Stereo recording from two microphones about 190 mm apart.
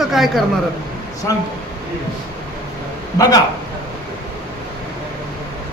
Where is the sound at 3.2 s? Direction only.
20° left (ahead or behind).